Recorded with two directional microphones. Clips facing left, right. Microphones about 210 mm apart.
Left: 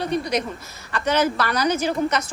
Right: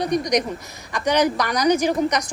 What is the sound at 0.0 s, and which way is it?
A woman's voice, 15° right (ahead or behind).